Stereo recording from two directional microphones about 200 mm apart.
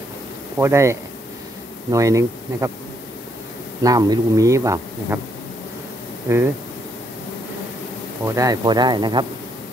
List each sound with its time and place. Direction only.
0.6 s a man's voice: 15° right (ahead or behind)
3.8 s a man's voice: 15° right (ahead or behind)
6.2 s a man's voice: 10° right (ahead or behind)
8.3 s speech: 15° right (ahead or behind)